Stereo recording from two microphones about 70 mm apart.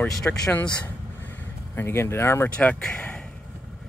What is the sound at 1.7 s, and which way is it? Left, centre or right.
Speech, left.